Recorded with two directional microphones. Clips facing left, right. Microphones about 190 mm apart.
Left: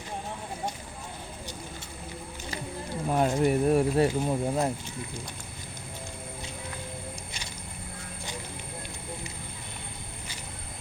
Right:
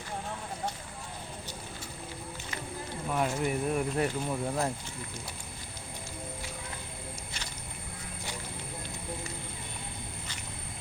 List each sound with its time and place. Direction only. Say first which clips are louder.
3.1 s speech: left 6 dB; 35° left (ahead or behind); by 4.7 s 20° left (ahead or behind)